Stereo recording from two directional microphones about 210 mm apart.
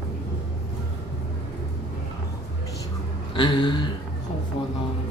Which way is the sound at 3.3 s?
20° left (ahead or behind).